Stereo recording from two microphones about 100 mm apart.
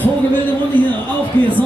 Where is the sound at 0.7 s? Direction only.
20° left (ahead or behind).